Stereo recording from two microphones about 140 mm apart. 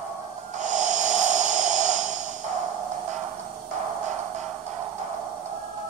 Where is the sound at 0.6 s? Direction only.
60° right (ahead or behind).